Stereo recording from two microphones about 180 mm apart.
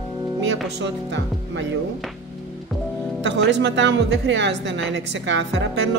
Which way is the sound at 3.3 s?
80° right.